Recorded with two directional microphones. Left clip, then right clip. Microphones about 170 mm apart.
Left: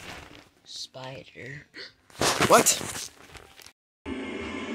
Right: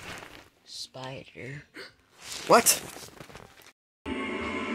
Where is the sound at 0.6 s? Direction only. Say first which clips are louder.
Left 1 dB; 10° right (ahead or behind).